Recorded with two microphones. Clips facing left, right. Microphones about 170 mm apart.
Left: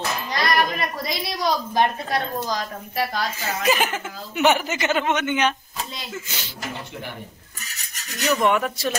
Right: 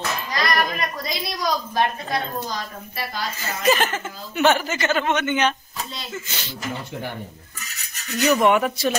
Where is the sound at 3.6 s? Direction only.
10° left (ahead or behind).